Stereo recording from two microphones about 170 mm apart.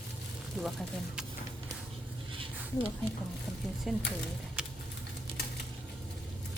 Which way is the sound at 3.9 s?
Centre (ahead or behind).